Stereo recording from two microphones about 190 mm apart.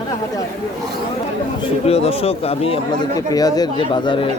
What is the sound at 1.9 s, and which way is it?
Speech, 30° left (ahead or behind).